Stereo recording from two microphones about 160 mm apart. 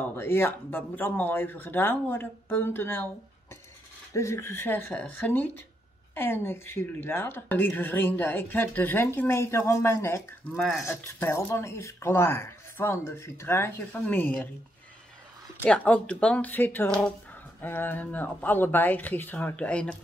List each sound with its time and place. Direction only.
0.1 s speech: 15° left (ahead or behind)
4.1 s speech: 20° left (ahead or behind)
10.5 s speech: 5° left (ahead or behind)
10.9 s speech: 15° left (ahead or behind)
15.6 s speech: 5° left (ahead or behind)